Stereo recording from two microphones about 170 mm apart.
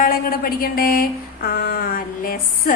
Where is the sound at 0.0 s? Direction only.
60° left (ahead or behind).